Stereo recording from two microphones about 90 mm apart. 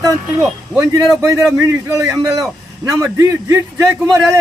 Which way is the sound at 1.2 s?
40° right (ahead or behind).